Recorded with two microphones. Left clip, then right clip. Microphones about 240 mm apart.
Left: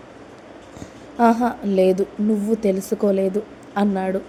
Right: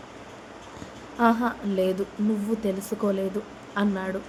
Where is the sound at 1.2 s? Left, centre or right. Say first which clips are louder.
Left 5 dB; centre.